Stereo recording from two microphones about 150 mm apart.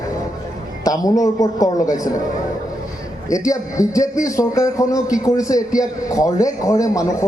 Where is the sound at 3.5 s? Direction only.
20° left (ahead or behind).